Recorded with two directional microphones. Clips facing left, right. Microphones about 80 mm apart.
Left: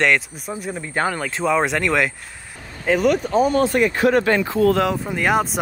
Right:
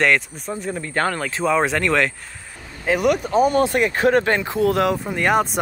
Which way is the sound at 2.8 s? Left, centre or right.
Centre.